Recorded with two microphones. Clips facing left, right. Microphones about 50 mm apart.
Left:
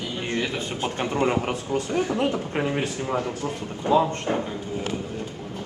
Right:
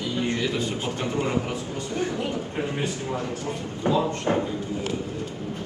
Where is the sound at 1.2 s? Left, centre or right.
Left.